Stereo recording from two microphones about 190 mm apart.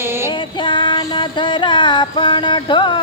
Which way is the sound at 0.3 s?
25° left (ahead or behind).